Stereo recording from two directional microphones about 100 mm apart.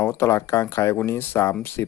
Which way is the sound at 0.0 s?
25° left (ahead or behind).